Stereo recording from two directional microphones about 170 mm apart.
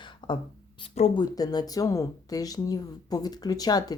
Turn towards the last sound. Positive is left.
turn(degrees=20)  # may be behind; listen again after turning